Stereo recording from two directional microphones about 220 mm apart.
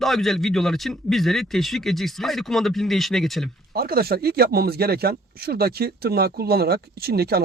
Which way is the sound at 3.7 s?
45° right (ahead or behind).